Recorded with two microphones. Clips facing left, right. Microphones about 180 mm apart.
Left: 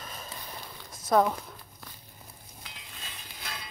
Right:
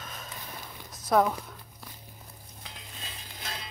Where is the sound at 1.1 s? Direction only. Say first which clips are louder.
Even; centre (ahead or behind).